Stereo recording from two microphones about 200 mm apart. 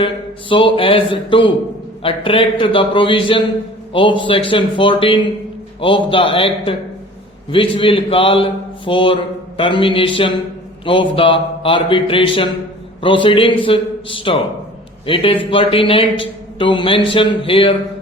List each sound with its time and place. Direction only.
0.0 s a man's voice: 25° left (ahead or behind)